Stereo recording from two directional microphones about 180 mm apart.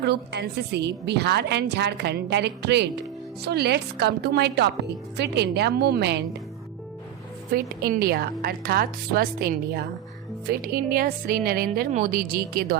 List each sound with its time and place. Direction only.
0.0 s a woman's voice: 70° right (ahead or behind)
7.5 s speech: 55° right (ahead or behind)